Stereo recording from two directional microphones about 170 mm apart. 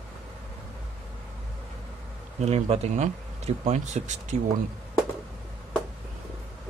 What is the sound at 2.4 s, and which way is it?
Speech, 40° right (ahead or behind).